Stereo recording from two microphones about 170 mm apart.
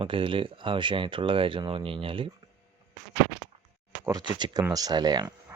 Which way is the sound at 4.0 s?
25° right (ahead or behind).